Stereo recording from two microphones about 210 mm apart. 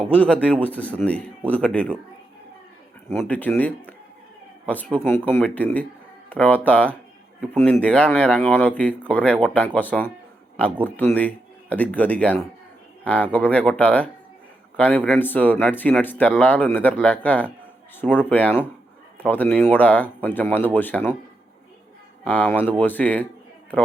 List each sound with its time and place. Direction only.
0.0 s speech: 5° left (ahead or behind)
3.1 s speech: 10° left (ahead or behind)
22.2 s speech: 5° left (ahead or behind)